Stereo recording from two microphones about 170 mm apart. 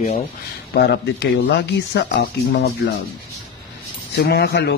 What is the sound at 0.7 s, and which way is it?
Speech, 80° left.